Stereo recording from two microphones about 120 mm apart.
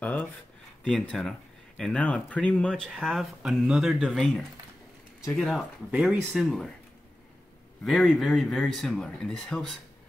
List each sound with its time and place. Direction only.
0.0 s a sound: 15° left (ahead or behind)
1.1 s speech: centre (ahead or behind)
7.8 s speech: centre (ahead or behind)